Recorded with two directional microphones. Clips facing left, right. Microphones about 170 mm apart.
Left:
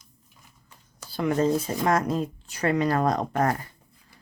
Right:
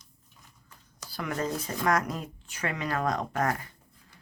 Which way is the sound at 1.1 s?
25° left (ahead or behind).